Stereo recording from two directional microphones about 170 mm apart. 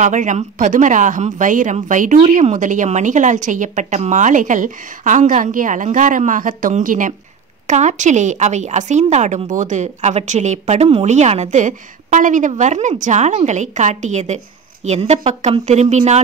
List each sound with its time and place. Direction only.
0.0 s a woman's voice: 45° right (ahead or behind)